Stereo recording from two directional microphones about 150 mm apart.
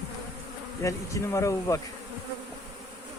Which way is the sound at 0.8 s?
20° left (ahead or behind).